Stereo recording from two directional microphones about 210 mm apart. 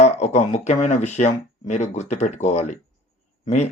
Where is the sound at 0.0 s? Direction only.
35° left (ahead or behind).